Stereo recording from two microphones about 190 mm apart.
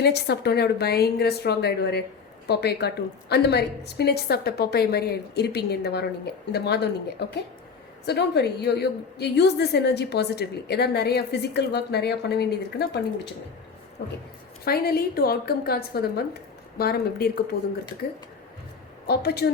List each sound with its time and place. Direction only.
0.0 s a woman's voice: 60° left (ahead or behind)
14.6 s a woman's voice: 55° left (ahead or behind)
19.0 s a woman's voice: 55° left (ahead or behind)